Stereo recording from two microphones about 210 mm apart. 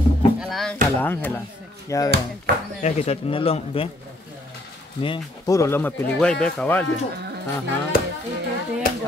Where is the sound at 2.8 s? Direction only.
30° left (ahead or behind).